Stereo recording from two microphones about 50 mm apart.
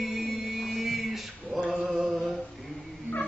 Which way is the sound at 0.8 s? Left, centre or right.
Centre.